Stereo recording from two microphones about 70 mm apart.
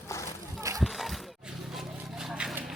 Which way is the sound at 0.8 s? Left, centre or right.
Centre.